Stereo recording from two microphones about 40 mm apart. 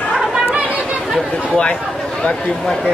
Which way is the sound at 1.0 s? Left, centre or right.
Centre.